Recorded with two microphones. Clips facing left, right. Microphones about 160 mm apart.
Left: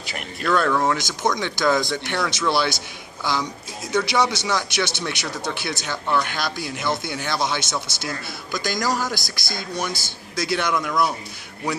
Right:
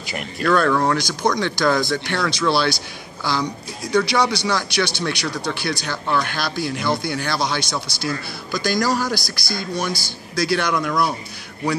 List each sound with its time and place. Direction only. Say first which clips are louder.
0.0 s speech: right 4 dB; centre (ahead or behind)
1.3 s a man's voice: right 1 dB; 20° left (ahead or behind)